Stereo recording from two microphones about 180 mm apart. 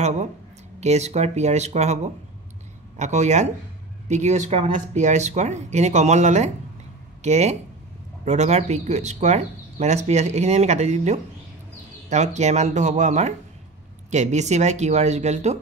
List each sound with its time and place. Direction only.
0.7 s speech: 40° right (ahead or behind)
3.0 s speech: 40° right (ahead or behind)